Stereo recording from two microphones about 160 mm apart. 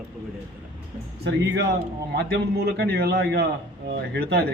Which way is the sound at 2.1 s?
90° right.